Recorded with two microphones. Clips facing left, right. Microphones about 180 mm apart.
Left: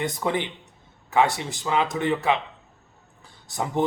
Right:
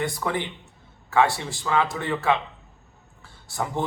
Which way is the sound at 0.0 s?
20° left (ahead or behind).